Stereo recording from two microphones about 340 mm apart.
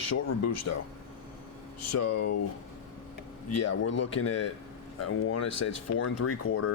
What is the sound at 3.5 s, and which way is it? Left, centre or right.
Speech, left.